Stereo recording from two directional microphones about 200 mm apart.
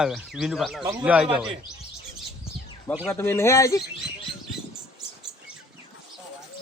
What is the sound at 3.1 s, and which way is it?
Speech, 10° left (ahead or behind).